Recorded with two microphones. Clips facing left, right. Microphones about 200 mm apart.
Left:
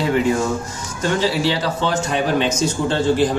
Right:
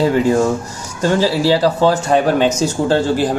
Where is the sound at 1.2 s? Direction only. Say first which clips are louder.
Right 6 dB; 35° right (ahead or behind).